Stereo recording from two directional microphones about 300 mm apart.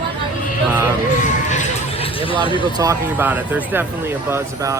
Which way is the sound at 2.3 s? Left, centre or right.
Centre.